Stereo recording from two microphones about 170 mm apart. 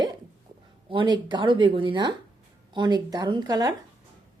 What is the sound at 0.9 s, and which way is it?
Speech, 30° right (ahead or behind).